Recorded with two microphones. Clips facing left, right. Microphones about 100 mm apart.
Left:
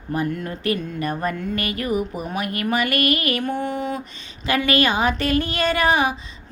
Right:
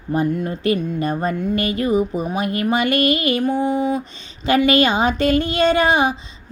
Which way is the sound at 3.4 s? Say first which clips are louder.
Right 6 dB; 15° right (ahead or behind).